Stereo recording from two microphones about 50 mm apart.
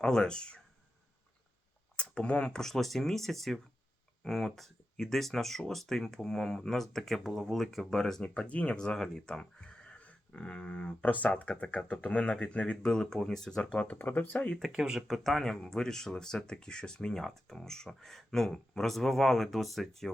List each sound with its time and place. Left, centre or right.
0.0 s speech: centre
2.0 s speech: left
8.2 s speech: left
8.8 s speech: centre
9.6 s a sound: left
11.3 s speech: left
12.8 s speech: centre
13.8 s speech: left
14.3 s speech: left
14.8 s speech: centre